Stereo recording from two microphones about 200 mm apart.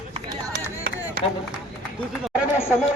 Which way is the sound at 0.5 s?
55° right (ahead or behind).